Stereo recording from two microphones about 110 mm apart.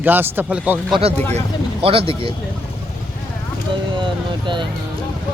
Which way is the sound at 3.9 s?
50° right (ahead or behind).